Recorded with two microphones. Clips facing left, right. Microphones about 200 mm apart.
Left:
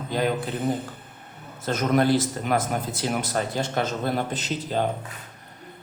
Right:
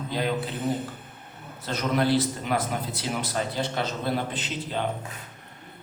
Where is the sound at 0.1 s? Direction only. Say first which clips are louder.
Left 4 dB; 50° left (ahead or behind).